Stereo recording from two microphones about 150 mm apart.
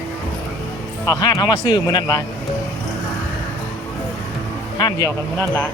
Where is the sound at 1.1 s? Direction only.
25° left (ahead or behind).